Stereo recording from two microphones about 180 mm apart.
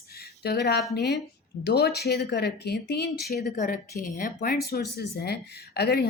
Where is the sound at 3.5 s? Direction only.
50° left (ahead or behind).